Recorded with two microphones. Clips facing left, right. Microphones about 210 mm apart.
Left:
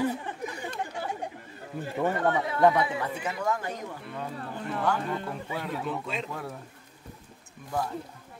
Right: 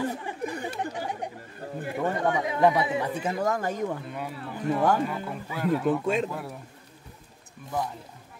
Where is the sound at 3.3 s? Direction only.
45° right (ahead or behind).